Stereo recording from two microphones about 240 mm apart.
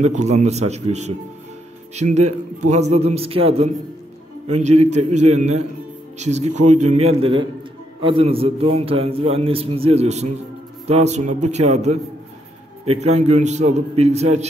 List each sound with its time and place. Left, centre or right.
0.0 s a man's voice: right